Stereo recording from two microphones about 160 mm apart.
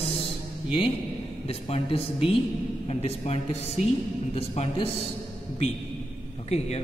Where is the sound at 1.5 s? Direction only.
40° left (ahead or behind).